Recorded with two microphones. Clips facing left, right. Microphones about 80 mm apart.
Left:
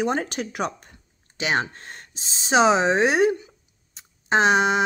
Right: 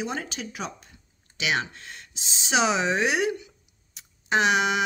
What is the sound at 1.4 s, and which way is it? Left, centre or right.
Speech, left.